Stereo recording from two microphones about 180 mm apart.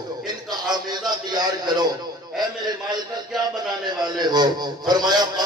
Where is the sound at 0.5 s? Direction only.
25° right (ahead or behind).